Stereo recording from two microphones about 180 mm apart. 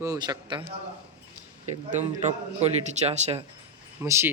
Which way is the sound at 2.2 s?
40° right (ahead or behind).